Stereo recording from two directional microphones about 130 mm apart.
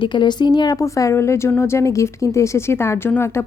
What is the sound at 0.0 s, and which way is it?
A woman's voice, 35° left (ahead or behind).